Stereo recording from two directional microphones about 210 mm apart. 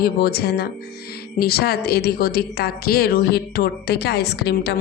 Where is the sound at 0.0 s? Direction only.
45° left (ahead or behind).